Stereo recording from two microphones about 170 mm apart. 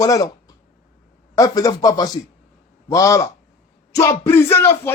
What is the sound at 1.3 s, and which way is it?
A man's voice, 20° left (ahead or behind).